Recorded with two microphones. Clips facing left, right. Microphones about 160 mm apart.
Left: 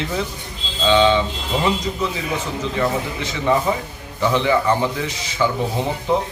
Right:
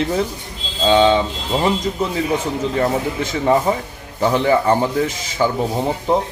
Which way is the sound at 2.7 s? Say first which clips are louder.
Right 2 dB; 45° right (ahead or behind).